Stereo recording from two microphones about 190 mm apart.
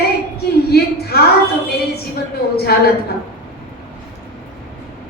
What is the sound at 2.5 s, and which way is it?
Speech, 55° left (ahead or behind).